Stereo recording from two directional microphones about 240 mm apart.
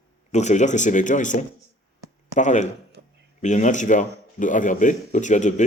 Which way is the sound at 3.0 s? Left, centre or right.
Right.